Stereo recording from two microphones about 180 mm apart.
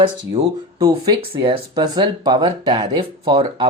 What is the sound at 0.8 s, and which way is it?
Speech, 20° right (ahead or behind).